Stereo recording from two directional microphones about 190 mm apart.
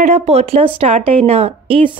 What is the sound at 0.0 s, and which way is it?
A woman's voice, 35° right (ahead or behind).